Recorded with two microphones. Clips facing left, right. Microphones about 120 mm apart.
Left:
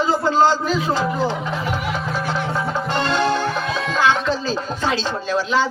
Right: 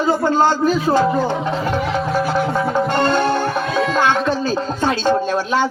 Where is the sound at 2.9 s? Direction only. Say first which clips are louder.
Even; 55° right (ahead or behind).